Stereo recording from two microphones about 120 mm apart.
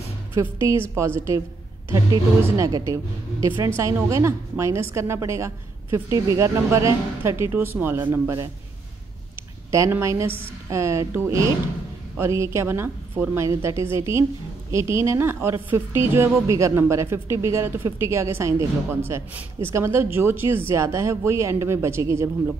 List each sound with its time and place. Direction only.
0.3 s a woman's voice: 20° right (ahead or behind)
2.5 s a woman's voice: 25° right (ahead or behind)
9.7 s a woman's voice: 20° right (ahead or behind)